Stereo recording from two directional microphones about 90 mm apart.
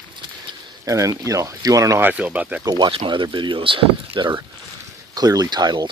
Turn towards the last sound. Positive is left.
turn(degrees=-50)  # may be behind; listen again after turning